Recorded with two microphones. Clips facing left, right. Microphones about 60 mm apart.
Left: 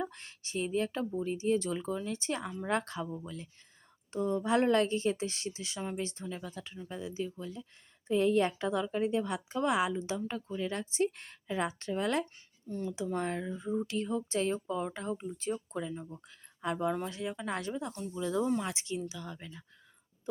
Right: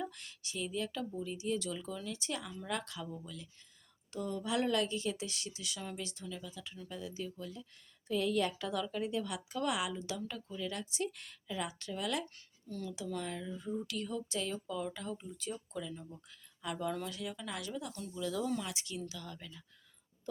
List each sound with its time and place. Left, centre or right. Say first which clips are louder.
0.0 s a woman's voice: left 4 dB; left
6.7 s a woman's voice: left 5 dB; left
13.6 s speech: left 5 dB; left